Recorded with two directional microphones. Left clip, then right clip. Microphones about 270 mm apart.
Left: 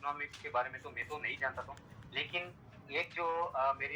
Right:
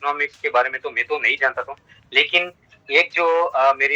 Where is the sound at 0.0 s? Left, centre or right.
Right.